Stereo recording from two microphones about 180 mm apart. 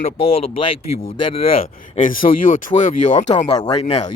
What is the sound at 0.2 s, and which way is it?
Speech, 30° left (ahead or behind).